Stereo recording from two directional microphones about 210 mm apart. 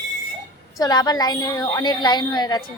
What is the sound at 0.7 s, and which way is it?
A woman's voice, 20° left (ahead or behind).